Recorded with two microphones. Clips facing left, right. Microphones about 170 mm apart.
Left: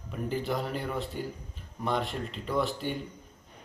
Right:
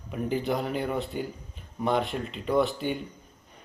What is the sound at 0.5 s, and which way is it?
Speech, centre (ahead or behind).